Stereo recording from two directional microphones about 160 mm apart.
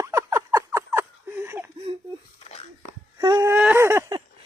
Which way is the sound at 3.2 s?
20° right (ahead or behind).